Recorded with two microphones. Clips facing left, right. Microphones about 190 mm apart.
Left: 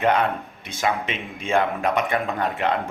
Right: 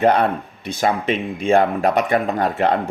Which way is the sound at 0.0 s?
35° right (ahead or behind).